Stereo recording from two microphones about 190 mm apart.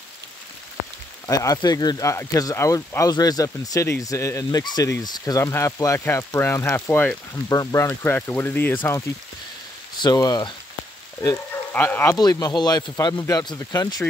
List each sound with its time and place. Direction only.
1.2 s speech: 15° left (ahead or behind)